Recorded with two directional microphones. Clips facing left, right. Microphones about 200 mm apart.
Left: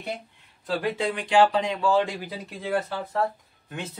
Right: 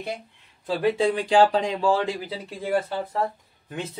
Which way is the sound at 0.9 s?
30° right (ahead or behind).